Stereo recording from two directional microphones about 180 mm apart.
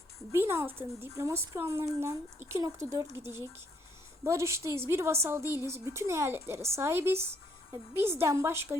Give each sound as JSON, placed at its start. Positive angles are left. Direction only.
{"t": 0.3, "sound": "a woman's voice", "side_deg": -15}